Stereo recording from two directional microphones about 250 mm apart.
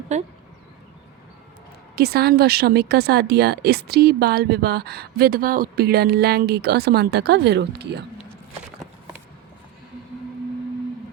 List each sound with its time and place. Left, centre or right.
0.1 s speech: right
2.0 s speech: right